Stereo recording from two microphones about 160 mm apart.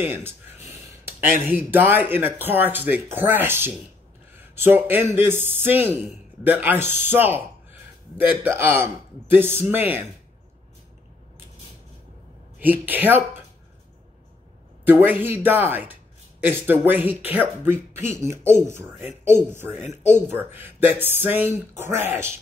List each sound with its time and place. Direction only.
0.0 s a sound: 15° right (ahead or behind)
1.5 s speech: 10° right (ahead or behind)
12.5 s speech: 10° right (ahead or behind)
14.9 s speech: 10° right (ahead or behind)
19.8 s speech: 45° left (ahead or behind)
20.3 s speech: 15° right (ahead or behind)